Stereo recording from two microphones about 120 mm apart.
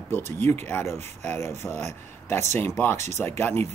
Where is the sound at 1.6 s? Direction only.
10° left (ahead or behind).